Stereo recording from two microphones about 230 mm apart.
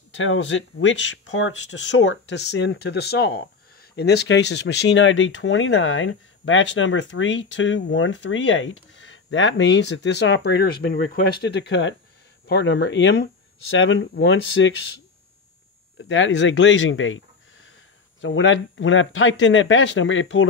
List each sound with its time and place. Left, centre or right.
0.1 s speech: left
16.0 s speech: left
18.2 s speech: left